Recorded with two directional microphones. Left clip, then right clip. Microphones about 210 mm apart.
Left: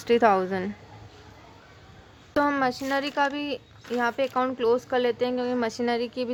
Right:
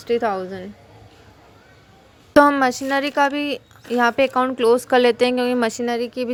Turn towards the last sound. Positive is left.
turn(degrees=-15)  # may be behind; listen again after turning